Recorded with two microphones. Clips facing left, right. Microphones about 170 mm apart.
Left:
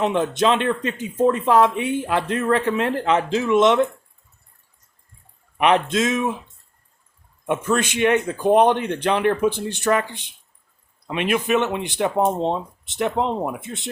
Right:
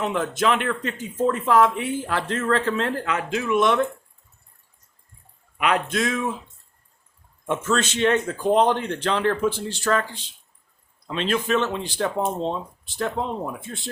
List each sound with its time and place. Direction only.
0.0 s speech: 20° left (ahead or behind)
5.5 s speech: 25° left (ahead or behind)
7.4 s speech: 15° left (ahead or behind)